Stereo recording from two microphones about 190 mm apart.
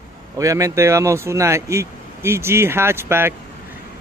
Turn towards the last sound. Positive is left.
turn(degrees=-10)  # may be behind; listen again after turning